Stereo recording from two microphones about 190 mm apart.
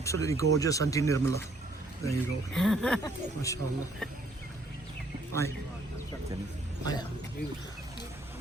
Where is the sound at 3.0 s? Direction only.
15° left (ahead or behind).